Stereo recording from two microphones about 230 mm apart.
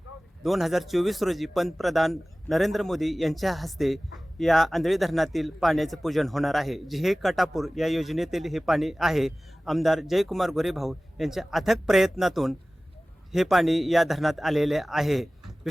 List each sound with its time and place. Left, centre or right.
0.4 s a man's voice: centre